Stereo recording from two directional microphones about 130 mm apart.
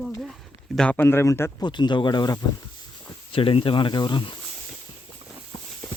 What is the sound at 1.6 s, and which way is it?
Speech, 35° left (ahead or behind).